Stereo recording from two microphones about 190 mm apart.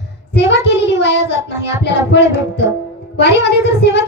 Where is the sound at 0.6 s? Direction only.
65° left (ahead or behind).